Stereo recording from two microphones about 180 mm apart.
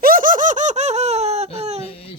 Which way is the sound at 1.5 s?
35° right (ahead or behind).